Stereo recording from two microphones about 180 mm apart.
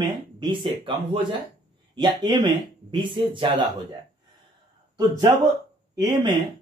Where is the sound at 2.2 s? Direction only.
25° right (ahead or behind).